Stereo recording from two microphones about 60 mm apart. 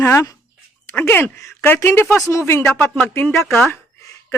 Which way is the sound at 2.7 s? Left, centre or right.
Left.